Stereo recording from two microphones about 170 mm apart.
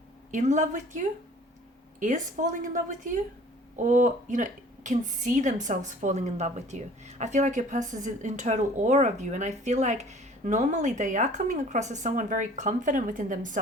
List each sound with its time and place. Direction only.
0.3 s a woman's voice: 45° right (ahead or behind)